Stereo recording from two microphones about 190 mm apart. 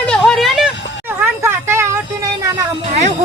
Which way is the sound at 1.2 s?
15° right (ahead or behind).